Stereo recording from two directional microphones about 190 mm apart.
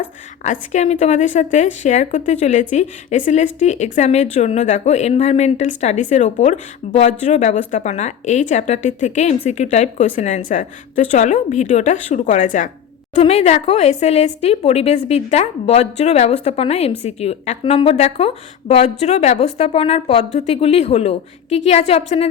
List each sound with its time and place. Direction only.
0.0 s a woman's voice: 40° left (ahead or behind)